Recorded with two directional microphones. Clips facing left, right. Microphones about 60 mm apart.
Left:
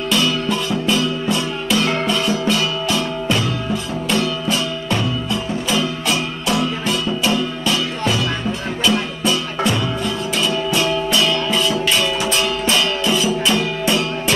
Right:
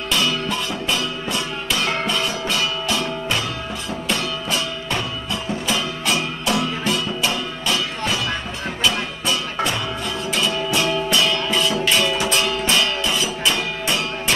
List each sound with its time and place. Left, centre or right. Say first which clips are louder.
0.1 s music: left 3 dB; right
1.8 s music: left 3 dB; right
2.1 s music: left 4 dB; right
8.8 s music: left 4 dB; right